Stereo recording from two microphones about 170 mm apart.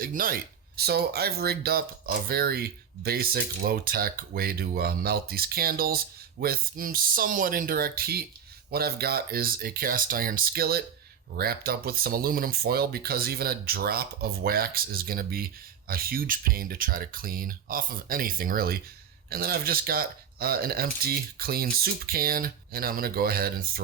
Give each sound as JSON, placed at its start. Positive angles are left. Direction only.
{"t": 0.0, "sound": "speech", "side_deg": -55}
{"t": 0.8, "sound": "speech", "side_deg": -65}